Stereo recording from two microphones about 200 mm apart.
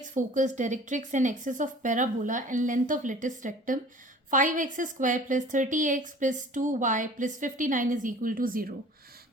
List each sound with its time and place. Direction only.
0.0 s a woman's voice: 40° right (ahead or behind)